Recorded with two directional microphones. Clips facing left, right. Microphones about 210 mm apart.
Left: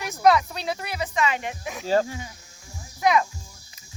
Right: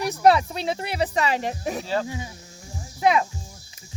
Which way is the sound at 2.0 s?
15° right (ahead or behind).